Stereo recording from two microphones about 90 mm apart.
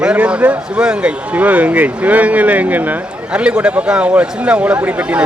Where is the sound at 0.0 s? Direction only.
10° right (ahead or behind).